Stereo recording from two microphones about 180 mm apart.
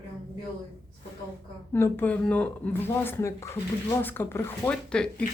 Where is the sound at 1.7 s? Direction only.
10° left (ahead or behind).